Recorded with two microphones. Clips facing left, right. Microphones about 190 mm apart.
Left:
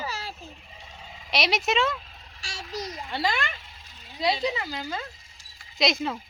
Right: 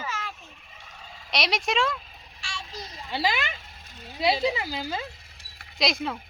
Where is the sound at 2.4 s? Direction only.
40° left (ahead or behind).